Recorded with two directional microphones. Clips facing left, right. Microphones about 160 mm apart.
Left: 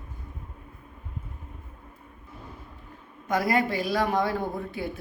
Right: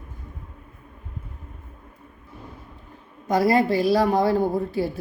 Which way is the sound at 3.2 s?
30° right (ahead or behind).